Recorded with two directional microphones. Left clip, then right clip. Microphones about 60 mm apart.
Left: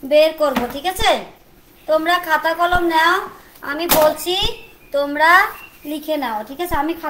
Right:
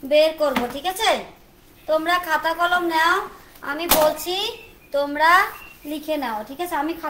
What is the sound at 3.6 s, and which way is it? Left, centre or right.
A child's voice, centre.